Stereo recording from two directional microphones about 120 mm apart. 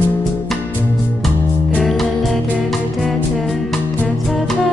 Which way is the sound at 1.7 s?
Centre (ahead or behind).